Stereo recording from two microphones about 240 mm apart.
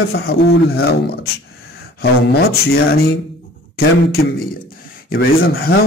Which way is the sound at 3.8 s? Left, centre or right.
Left.